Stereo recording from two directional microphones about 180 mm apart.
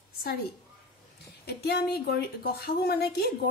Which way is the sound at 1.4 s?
65° left (ahead or behind).